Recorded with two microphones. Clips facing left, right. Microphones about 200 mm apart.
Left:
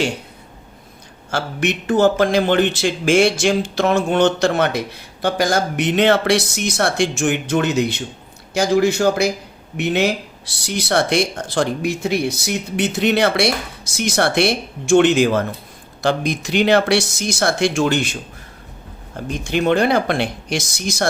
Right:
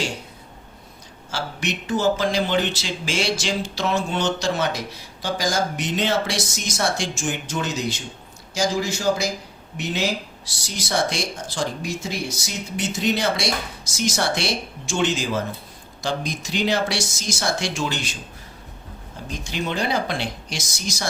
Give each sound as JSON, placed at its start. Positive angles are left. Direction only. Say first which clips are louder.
{"t": 1.3, "sound": "speech", "louder": "left 7 dB", "side_deg": 55}
{"t": 19.1, "sound": "speech", "louder": "left 9 dB", "side_deg": 60}